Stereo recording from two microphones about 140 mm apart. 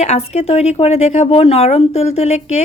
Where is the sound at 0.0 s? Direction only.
50° left (ahead or behind).